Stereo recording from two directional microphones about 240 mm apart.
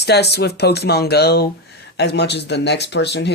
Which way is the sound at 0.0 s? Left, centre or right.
Left.